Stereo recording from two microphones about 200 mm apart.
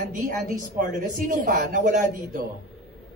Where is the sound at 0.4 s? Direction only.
40° right (ahead or behind).